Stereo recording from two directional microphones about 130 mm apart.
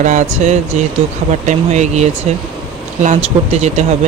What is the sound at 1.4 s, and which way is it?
Speech, 60° right (ahead or behind).